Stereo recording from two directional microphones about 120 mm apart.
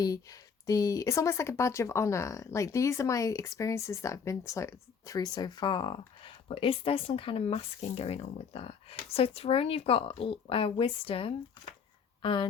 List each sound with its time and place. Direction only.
0.0 s speech: 30° left (ahead or behind)